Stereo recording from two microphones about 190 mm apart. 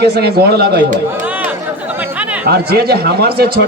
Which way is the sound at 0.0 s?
55° right (ahead or behind).